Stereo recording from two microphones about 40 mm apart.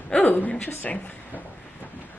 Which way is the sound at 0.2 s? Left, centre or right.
Left.